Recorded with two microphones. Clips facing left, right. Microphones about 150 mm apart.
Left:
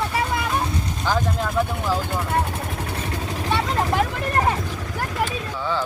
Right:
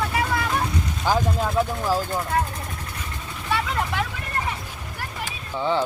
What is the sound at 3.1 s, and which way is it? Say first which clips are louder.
Vehicle: left 8 dB; 90° left.